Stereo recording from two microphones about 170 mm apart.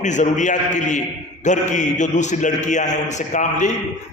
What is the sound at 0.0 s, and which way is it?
A man's voice, 45° left (ahead or behind).